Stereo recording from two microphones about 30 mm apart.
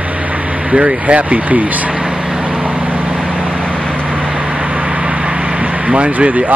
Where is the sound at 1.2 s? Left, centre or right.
Right.